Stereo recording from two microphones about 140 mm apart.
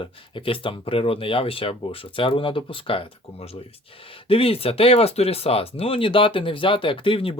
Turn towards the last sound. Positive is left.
turn(degrees=40)  # may be behind; listen again after turning